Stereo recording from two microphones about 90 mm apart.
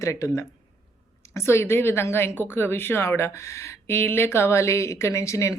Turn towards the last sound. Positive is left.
turn(degrees=35)  # may be behind; listen again after turning